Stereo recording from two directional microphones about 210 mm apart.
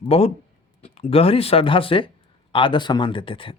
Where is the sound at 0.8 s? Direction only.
30° left (ahead or behind).